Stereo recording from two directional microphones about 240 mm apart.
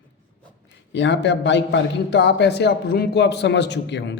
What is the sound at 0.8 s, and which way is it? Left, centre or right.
A man's voice, left.